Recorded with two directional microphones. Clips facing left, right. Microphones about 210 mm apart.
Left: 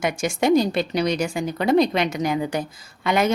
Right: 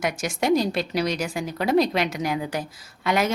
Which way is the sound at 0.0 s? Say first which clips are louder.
Left 3 dB; centre (ahead or behind).